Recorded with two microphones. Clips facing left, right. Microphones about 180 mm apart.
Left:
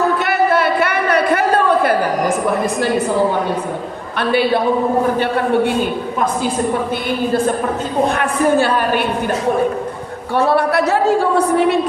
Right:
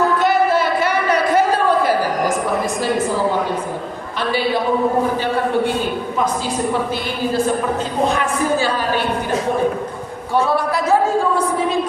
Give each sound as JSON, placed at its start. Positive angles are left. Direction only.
{"t": 0.2, "sound": "a sound", "side_deg": 65}
{"t": 4.2, "sound": "a man's voice", "side_deg": 60}
{"t": 8.1, "sound": "a woman's voice", "side_deg": 60}
{"t": 10.3, "sound": "a woman's voice", "side_deg": 65}